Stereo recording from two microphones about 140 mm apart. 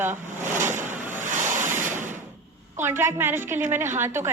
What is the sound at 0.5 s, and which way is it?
Vehicle, 15° right (ahead or behind).